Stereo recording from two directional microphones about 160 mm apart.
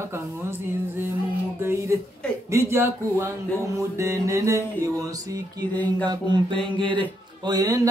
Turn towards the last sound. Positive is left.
turn(degrees=-25)  # may be behind; listen again after turning